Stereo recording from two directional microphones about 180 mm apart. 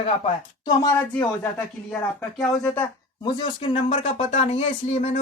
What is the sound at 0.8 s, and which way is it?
Speech, 15° left (ahead or behind).